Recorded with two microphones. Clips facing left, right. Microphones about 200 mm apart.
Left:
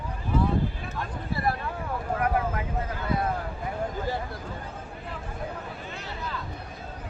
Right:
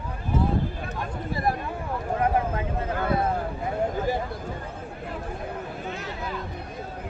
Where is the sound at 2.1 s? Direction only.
25° right (ahead or behind).